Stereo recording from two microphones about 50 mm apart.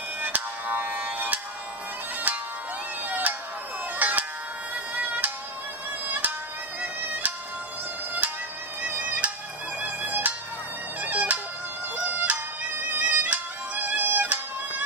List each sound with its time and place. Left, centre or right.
0.2 s music: right
8.8 s music: right
11.0 s bagpipes: right
11.9 s music: right